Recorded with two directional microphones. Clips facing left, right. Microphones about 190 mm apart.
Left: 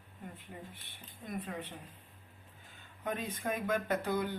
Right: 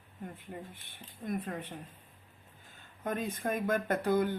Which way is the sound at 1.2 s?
50° right (ahead or behind).